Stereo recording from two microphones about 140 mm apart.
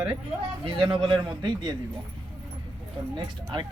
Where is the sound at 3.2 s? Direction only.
35° right (ahead or behind).